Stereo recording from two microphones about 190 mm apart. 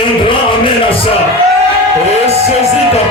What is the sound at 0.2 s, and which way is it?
Music, 25° left (ahead or behind).